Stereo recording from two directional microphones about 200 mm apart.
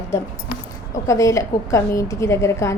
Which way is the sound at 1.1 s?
15° left (ahead or behind).